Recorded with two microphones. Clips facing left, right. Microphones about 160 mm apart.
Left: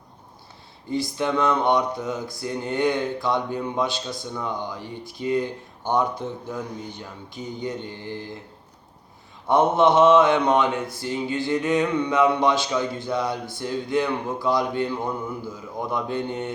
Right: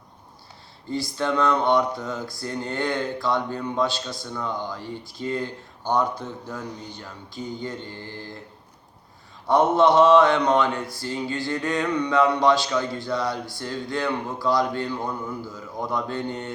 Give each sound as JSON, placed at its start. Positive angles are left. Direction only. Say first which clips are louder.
{"t": 0.9, "sound": "mantra", "louder": "left 1 dB", "side_deg": 20}
{"t": 9.5, "sound": "mantra", "louder": "even", "side_deg": 20}